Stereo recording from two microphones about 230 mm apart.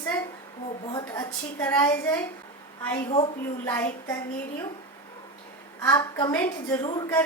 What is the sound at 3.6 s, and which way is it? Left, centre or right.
Speech, centre.